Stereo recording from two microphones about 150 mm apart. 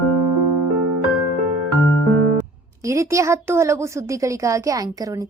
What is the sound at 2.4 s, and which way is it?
A woman's voice, 20° right (ahead or behind).